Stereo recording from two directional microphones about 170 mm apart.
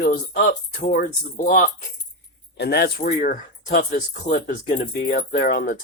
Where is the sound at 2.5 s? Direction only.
75° left (ahead or behind).